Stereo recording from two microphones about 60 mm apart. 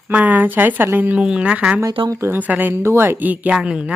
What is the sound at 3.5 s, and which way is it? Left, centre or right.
Speech, centre.